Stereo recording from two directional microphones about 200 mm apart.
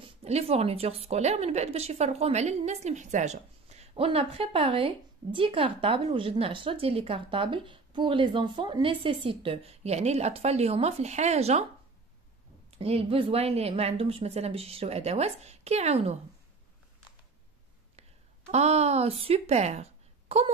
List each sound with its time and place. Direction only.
0.0 s a woman's voice: 30° right (ahead or behind)
12.7 s speech: 30° right (ahead or behind)
18.5 s speech: 35° right (ahead or behind)